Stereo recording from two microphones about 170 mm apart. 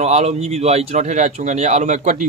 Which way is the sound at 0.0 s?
40° right (ahead or behind).